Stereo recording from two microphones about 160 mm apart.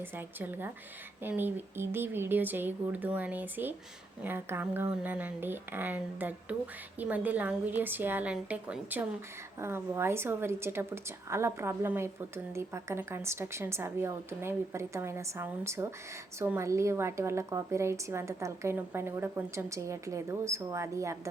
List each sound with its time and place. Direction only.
0.0 s a woman's voice: 10° right (ahead or behind)